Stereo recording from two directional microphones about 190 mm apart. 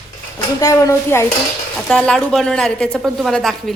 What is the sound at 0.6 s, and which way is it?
Speech, 15° left (ahead or behind).